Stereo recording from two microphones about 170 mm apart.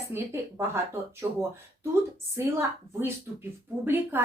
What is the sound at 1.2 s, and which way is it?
A woman's voice, 15° right (ahead or behind).